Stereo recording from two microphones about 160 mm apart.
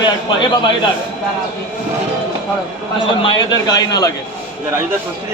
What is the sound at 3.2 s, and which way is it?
Speech, 25° left (ahead or behind).